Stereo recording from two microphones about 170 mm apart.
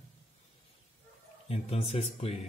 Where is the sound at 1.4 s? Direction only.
35° left (ahead or behind).